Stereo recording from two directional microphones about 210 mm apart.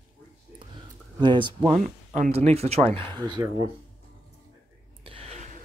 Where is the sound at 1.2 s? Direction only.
20° right (ahead or behind).